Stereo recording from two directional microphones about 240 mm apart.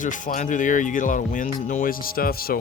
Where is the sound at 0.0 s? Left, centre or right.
Left.